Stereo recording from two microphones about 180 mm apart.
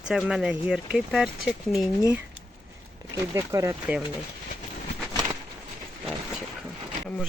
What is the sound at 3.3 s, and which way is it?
Speech, 15° right (ahead or behind).